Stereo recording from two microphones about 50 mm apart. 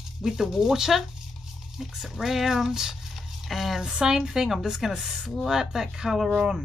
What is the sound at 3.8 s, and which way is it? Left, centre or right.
A woman's voice, centre.